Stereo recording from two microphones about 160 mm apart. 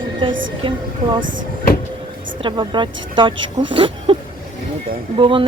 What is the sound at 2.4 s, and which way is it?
Speech, 30° right (ahead or behind).